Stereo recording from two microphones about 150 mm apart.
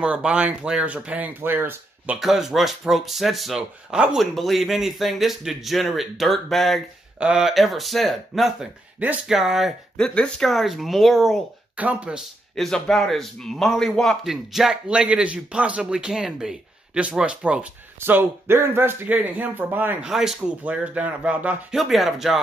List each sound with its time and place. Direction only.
0.0 s speech: 5° right (ahead or behind)
2.1 s speech: centre (ahead or behind)